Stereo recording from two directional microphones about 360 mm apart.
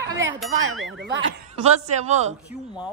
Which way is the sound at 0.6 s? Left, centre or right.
Right.